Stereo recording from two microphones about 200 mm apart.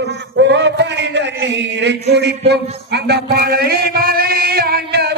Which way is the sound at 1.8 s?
60° right (ahead or behind).